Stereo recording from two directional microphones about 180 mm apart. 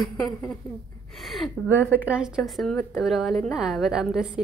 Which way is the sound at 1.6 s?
10° right (ahead or behind).